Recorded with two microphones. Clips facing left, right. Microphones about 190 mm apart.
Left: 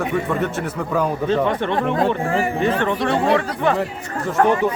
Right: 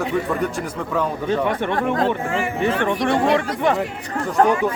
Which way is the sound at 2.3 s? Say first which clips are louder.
Left 3 dB; 40° left (ahead or behind).